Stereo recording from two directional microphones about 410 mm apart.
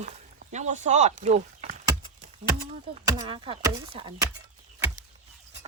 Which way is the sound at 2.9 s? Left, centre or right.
Centre.